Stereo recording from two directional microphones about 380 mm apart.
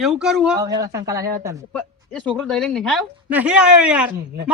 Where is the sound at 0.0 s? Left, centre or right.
Centre.